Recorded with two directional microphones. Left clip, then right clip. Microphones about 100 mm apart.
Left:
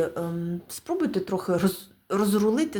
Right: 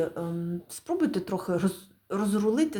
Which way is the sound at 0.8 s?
5° left (ahead or behind).